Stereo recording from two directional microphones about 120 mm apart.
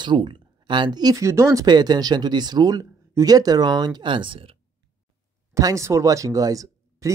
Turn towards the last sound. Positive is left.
turn(degrees=-30)  # may be behind; listen again after turning